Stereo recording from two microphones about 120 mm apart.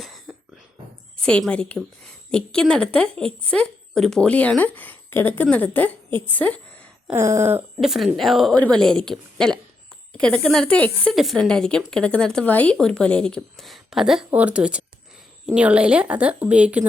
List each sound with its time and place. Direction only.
1.2 s a woman's voice: 10° left (ahead or behind)
7.1 s a sound: 20° right (ahead or behind)
7.8 s a woman's voice: centre (ahead or behind)
11.1 s a woman's voice: centre (ahead or behind)